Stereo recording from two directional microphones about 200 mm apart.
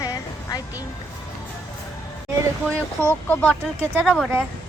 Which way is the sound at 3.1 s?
10° left (ahead or behind).